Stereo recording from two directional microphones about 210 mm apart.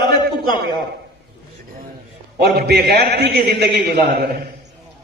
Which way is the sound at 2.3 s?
50° right (ahead or behind).